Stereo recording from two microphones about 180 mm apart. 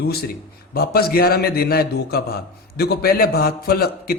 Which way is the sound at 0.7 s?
55° left (ahead or behind).